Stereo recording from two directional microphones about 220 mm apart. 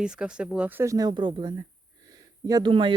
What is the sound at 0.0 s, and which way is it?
Speech, 5° right (ahead or behind).